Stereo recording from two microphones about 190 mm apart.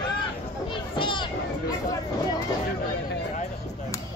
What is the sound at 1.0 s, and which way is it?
Children playing, 25° left (ahead or behind).